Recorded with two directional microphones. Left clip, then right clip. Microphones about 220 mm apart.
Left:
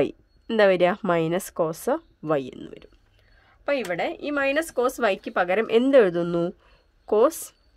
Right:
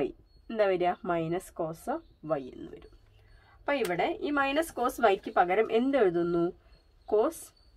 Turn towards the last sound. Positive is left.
turn(degrees=50)  # may be behind; listen again after turning